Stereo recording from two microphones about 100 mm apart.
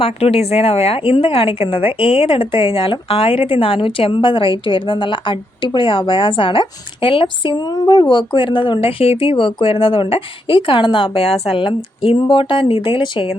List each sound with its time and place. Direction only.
0.0 s a woman's voice: 80° left; by 11.1 s 55° left (ahead or behind)
11.1 s a woman's voice: 80° left; by 13.3 s 60° left (ahead or behind)